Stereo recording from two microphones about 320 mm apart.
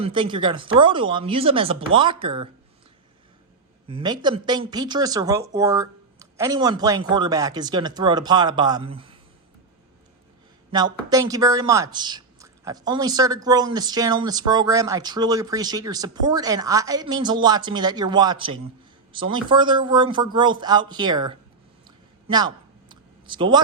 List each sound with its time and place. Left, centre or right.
0.0 s speech: centre
3.8 s speech: centre
11.1 s speech: centre
21.8 s a sound: centre